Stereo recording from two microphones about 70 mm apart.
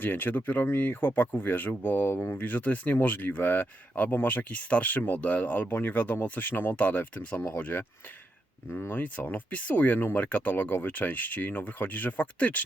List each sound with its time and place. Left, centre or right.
0.0 s speech: left